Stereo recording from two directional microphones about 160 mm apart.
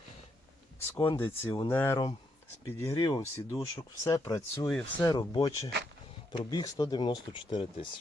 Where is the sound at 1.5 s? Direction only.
25° left (ahead or behind).